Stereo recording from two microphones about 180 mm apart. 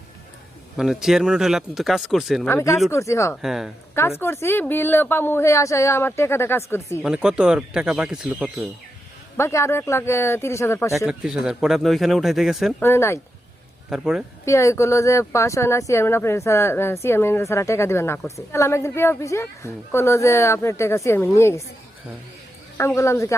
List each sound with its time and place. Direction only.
0.8 s speech: 5° right (ahead or behind)
2.5 s speech: 15° left (ahead or behind)
3.4 s speech: centre (ahead or behind)
3.9 s speech: 15° left (ahead or behind)
7.0 s speech: 5° right (ahead or behind)
9.4 s speech: 15° left (ahead or behind)
10.9 s speech: 5° right (ahead or behind)
12.8 s speech: 15° left (ahead or behind)
13.9 s speech: 5° right (ahead or behind)
14.4 s speech: 15° left (ahead or behind)
22.8 s speech: 15° left (ahead or behind)